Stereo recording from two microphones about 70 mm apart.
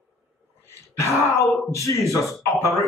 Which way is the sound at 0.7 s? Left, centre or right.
Left.